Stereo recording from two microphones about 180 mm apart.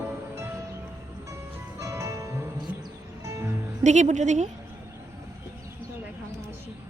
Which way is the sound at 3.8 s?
40° right (ahead or behind).